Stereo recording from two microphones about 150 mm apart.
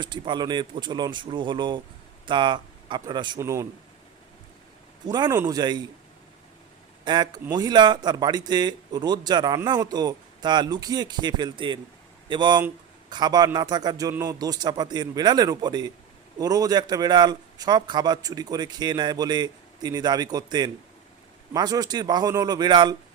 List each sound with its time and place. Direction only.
0.0 s speech: 30° right (ahead or behind)
3.3 s a man's voice: 20° right (ahead or behind)
5.0 s a man's voice: 25° right (ahead or behind)
7.0 s a man's voice: 30° right (ahead or behind)